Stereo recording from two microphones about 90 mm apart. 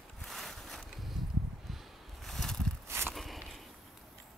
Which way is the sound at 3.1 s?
Centre (ahead or behind).